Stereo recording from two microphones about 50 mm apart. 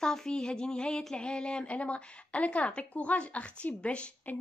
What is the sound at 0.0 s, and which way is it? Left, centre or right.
A woman's voice, centre.